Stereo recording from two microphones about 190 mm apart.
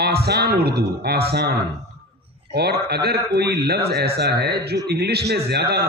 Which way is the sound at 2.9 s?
60° right (ahead or behind).